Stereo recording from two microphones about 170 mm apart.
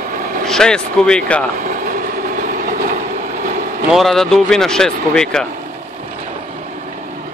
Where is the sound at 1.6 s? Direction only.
55° right (ahead or behind).